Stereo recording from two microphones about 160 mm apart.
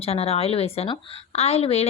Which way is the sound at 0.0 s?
40° left (ahead or behind).